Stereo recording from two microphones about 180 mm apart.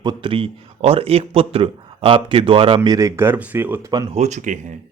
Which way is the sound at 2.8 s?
20° right (ahead or behind).